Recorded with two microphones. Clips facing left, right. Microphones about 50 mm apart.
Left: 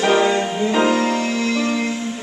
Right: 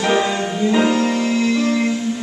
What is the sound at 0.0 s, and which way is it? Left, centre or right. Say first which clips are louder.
Music: left 2 dB; centre.